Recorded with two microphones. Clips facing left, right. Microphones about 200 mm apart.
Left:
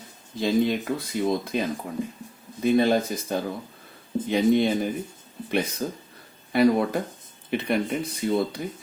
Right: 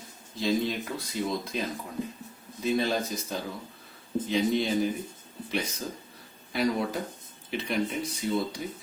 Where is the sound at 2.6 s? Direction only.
55° left (ahead or behind).